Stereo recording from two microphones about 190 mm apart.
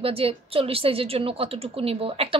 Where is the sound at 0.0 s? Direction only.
30° right (ahead or behind).